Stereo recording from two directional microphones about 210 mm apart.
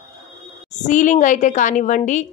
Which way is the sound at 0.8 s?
35° left (ahead or behind).